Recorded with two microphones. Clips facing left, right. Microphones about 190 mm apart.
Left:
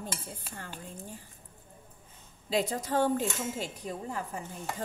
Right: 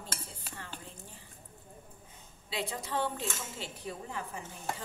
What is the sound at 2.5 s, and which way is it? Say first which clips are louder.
Speech: left 7 dB; 45° left (ahead or behind).